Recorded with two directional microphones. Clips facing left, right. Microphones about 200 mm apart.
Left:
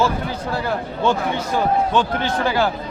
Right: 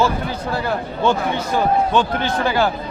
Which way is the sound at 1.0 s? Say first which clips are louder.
Right 1 dB; 65° right (ahead or behind).